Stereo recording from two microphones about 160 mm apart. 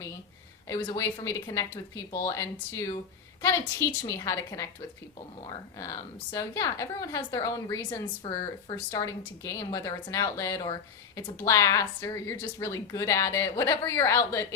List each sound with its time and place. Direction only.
0.7 s a woman's voice: 20° left (ahead or behind)